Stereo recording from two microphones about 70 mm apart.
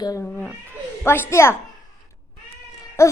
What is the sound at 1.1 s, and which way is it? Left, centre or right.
Speech, left.